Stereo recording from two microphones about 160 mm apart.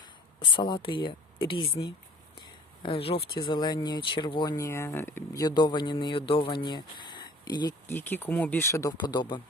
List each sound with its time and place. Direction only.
0.0 s speech: 30° left (ahead or behind)
2.8 s speech: 35° left (ahead or behind)
7.9 s speech: 15° left (ahead or behind); by 9.4 s 30° left (ahead or behind)